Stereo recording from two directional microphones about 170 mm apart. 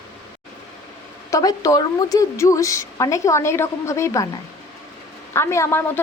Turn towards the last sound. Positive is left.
turn(degrees=15)  # may be behind; listen again after turning